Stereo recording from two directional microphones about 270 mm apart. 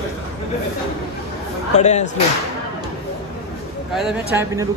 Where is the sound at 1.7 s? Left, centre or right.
Left.